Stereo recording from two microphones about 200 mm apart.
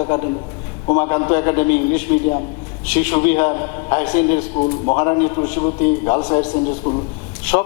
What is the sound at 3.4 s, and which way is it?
A man's voice, 25° left (ahead or behind).